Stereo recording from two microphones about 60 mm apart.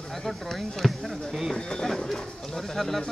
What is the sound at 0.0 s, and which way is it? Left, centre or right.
Speech, centre.